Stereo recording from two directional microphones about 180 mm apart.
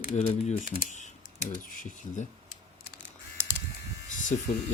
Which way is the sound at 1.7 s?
45° left (ahead or behind).